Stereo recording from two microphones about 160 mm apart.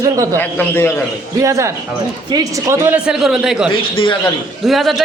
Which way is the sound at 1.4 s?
20° right (ahead or behind).